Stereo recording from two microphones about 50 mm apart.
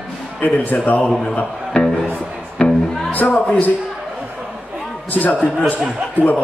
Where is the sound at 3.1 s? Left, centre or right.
Left.